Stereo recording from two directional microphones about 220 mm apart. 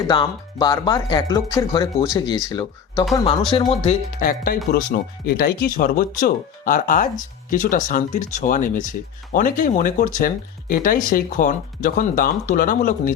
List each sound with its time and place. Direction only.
0.1 s speech: 20° left (ahead or behind)
4.2 s speech: 40° left (ahead or behind)